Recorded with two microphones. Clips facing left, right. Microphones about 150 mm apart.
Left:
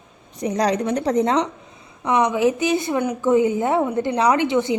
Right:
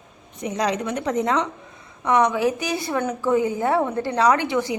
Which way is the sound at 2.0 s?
10° left (ahead or behind).